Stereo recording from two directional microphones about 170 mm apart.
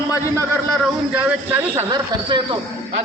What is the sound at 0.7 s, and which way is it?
Speech, 5° right (ahead or behind).